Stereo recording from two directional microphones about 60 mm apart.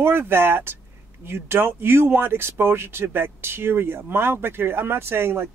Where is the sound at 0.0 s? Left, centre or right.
Right.